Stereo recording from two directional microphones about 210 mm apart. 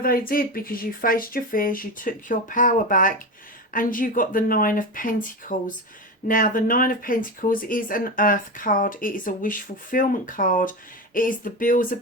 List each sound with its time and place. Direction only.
0.0 s speech: 45° left (ahead or behind)